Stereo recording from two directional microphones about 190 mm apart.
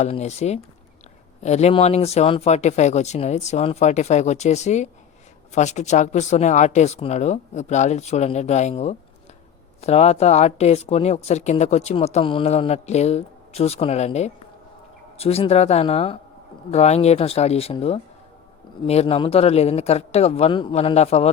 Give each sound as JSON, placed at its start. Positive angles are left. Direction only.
{"t": 0.0, "sound": "speech", "side_deg": 35}